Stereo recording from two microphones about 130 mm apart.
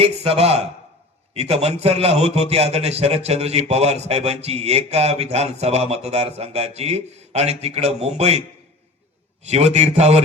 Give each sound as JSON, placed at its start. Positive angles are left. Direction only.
{"t": 0.0, "sound": "a man's voice", "side_deg": -50}